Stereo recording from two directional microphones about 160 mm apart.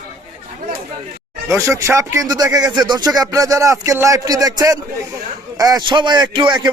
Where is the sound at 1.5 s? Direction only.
20° right (ahead or behind).